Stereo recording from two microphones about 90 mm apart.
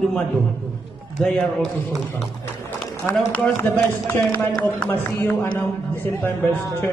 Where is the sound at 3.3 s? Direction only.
20° left (ahead or behind).